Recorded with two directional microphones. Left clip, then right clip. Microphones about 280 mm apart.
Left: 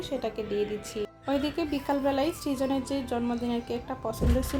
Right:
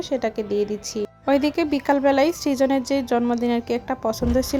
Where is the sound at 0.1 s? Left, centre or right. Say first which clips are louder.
Right 8 dB; right.